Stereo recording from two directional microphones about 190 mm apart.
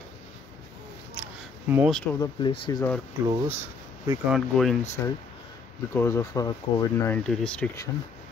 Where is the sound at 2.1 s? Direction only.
25° left (ahead or behind).